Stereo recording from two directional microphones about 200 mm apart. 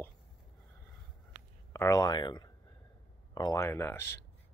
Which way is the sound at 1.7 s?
15° left (ahead or behind).